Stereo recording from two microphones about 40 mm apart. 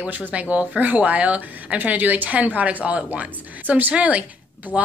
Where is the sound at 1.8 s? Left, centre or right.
Right.